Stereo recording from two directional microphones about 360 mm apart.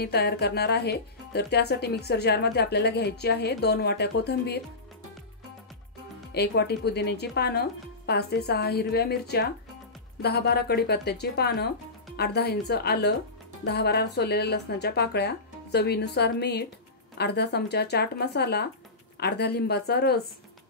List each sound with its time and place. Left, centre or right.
0.0 s speech: left
6.3 s speech: left